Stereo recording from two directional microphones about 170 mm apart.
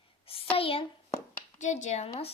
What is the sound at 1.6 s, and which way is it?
Speech, 45° left (ahead or behind).